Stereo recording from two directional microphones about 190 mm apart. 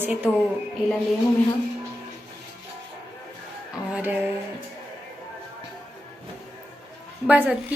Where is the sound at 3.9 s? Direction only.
10° right (ahead or behind).